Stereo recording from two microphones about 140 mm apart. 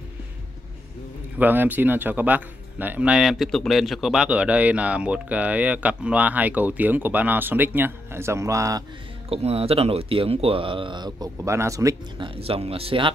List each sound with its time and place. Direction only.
1.4 s speech: 15° right (ahead or behind)
9.3 s speech: 45° right (ahead or behind); by 12.0 s 25° right (ahead or behind)
12.2 s speech: 45° right (ahead or behind)